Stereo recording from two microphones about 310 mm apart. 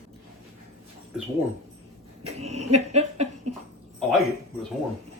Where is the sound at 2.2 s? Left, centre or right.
Right.